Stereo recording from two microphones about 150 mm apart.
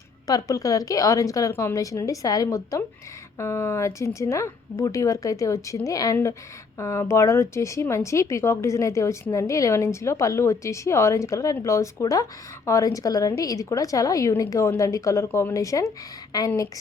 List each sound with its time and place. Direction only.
0.3 s speech: 20° left (ahead or behind)